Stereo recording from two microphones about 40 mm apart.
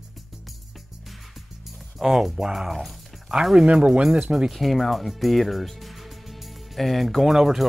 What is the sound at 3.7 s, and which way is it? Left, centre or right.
Speech, right.